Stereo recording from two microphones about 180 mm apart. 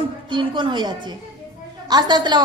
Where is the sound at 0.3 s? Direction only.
25° right (ahead or behind).